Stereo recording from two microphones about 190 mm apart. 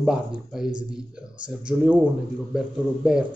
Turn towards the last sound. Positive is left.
turn(degrees=-5)  # may be behind; listen again after turning